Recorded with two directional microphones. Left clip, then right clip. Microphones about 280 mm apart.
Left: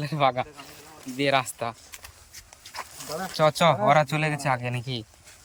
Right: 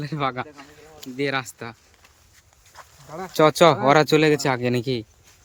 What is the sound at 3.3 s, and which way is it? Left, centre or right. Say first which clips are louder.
Speech: right 5 dB; centre.